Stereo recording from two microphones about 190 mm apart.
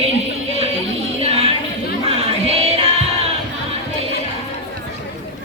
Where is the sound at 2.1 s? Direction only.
30° right (ahead or behind).